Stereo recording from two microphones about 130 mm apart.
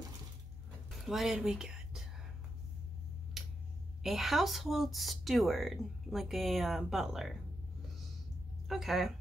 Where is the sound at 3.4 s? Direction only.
Centre (ahead or behind).